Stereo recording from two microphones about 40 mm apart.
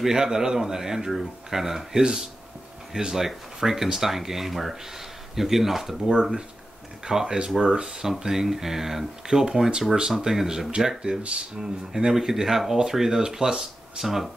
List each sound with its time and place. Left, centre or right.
0.0 s speech: centre